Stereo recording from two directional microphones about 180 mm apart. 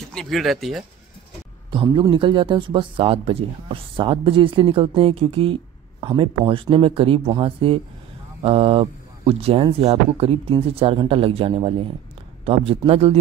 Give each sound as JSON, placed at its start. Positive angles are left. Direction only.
{"t": 0.1, "sound": "speech", "side_deg": 0}
{"t": 1.7, "sound": "speech", "side_deg": -25}